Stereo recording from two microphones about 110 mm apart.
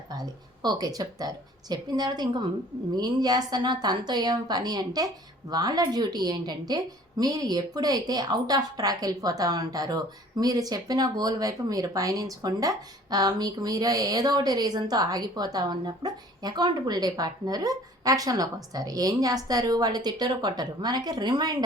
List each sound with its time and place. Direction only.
0.1 s a woman's voice: 40° right (ahead or behind)